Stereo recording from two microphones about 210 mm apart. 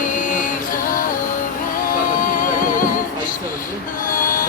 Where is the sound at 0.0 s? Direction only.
40° left (ahead or behind).